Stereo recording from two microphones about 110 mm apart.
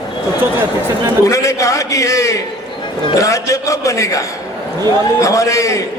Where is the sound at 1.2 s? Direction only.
30° left (ahead or behind).